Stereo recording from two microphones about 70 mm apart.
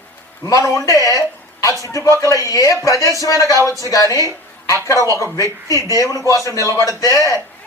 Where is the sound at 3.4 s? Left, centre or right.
Right.